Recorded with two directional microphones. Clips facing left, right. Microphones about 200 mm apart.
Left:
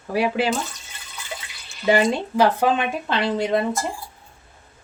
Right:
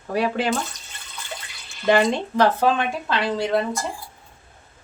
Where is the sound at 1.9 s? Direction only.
10° left (ahead or behind).